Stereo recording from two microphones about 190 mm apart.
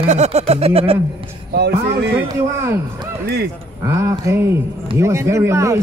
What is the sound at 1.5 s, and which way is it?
Speech, 60° right (ahead or behind).